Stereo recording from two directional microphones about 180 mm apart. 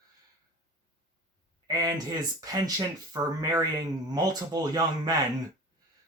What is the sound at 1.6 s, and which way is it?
Speech, 20° right (ahead or behind).